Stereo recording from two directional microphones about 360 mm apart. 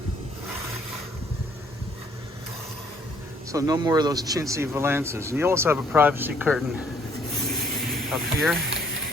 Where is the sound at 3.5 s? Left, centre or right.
Centre.